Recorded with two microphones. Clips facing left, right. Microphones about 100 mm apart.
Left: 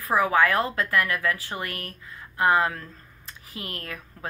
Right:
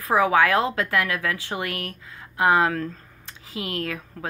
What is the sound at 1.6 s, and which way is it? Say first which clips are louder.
Speech: right 4 dB; 90° right.